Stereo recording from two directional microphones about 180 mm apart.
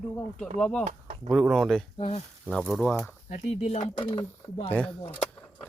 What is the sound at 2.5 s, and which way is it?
Speech, centre (ahead or behind).